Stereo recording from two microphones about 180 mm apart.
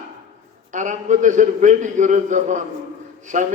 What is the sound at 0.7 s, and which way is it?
A man's voice, 45° right (ahead or behind).